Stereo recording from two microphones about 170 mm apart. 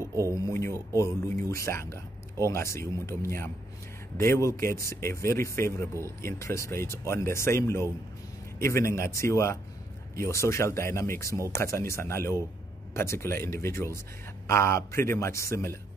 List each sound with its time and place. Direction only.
0.3 s speech: 15° left (ahead or behind)